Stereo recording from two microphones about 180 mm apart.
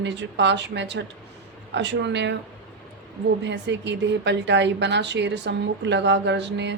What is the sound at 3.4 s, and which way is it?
A woman's voice, 75° right (ahead or behind).